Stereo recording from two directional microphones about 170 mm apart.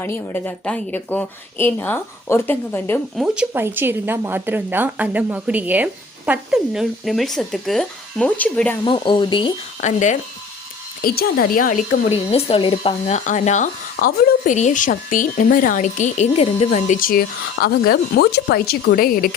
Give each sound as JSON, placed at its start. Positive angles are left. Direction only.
{"t": 0.0, "sound": "a woman's voice", "side_deg": 10}
{"t": 3.2, "sound": "speech", "side_deg": -5}
{"t": 8.8, "sound": "speech", "side_deg": 30}
{"t": 9.8, "sound": "speech", "side_deg": 45}
{"t": 11.0, "sound": "speech", "side_deg": 65}
{"t": 12.0, "sound": "speech", "side_deg": 35}